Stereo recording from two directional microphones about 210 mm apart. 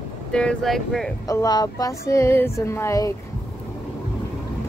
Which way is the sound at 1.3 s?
15° left (ahead or behind).